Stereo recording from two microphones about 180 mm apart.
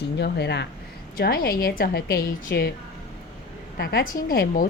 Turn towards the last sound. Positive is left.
turn(degrees=50)  # may be behind; listen again after turning